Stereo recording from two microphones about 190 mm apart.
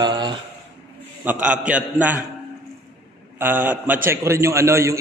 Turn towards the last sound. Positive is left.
turn(degrees=-15)  # may be behind; listen again after turning